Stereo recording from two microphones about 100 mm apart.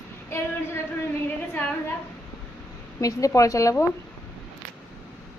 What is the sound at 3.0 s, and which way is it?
Speech, 35° left (ahead or behind).